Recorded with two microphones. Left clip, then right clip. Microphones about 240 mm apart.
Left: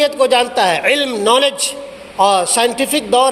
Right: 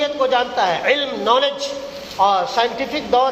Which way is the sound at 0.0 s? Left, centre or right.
Left.